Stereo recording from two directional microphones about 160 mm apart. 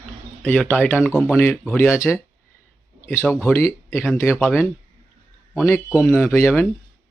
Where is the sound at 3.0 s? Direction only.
15° left (ahead or behind).